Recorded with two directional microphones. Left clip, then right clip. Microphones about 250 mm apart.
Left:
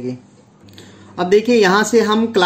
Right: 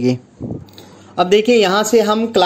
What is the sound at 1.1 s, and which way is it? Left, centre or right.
Speech, centre.